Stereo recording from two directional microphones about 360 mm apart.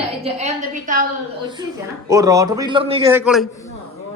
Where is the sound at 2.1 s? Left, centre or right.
Centre.